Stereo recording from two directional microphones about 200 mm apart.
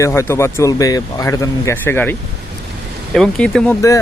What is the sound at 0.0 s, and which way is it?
Speech, 15° left (ahead or behind).